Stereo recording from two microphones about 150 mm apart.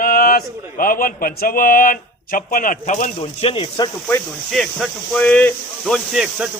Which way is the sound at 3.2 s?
35° left (ahead or behind).